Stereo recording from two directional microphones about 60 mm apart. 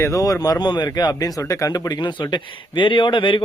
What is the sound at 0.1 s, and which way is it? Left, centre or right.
Speech, left.